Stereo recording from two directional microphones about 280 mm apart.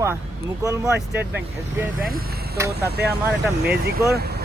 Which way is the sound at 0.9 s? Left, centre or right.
Right.